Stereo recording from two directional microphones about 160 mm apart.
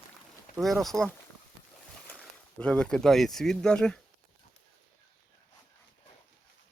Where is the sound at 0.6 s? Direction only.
Centre (ahead or behind).